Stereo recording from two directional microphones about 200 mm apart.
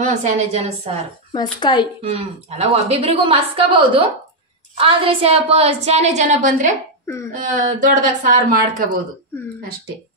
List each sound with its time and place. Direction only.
0.0 s a woman's voice: 35° right (ahead or behind)
1.3 s speech: 20° left (ahead or behind)
2.1 s a woman's voice: 30° right (ahead or behind)